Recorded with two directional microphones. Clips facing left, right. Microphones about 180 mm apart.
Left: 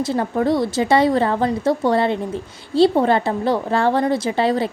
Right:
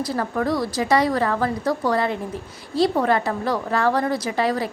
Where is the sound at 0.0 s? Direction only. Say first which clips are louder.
Left 4 dB; 25° left (ahead or behind).